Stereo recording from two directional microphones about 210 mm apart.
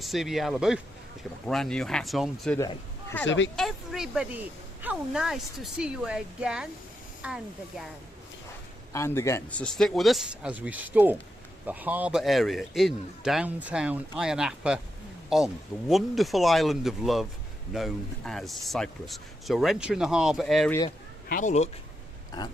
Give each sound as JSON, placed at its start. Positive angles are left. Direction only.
{"t": 0.0, "sound": "a man's voice", "side_deg": 0}
{"t": 2.6, "sound": "speech", "side_deg": 15}
{"t": 3.2, "sound": "speech", "side_deg": 60}
{"t": 3.5, "sound": "a man's voice", "side_deg": 0}
{"t": 8.9, "sound": "a man's voice", "side_deg": 10}
{"t": 21.2, "sound": "speech", "side_deg": 40}